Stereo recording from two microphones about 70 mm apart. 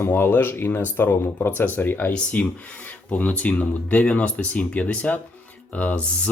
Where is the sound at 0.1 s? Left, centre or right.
Left.